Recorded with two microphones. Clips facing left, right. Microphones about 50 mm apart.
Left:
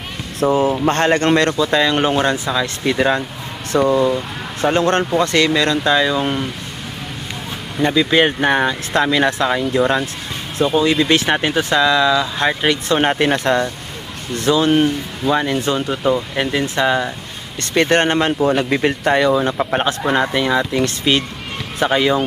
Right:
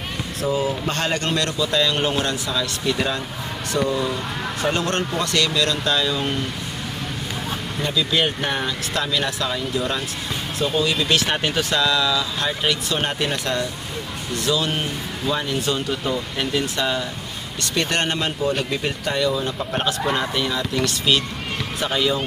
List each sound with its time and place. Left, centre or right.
0.3 s speech: left; by 6.4 s centre
7.8 s speech: left
10.6 s speech: centre